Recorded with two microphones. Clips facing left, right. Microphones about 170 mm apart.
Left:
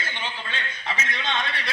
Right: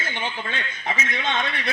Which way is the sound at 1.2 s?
50° right (ahead or behind).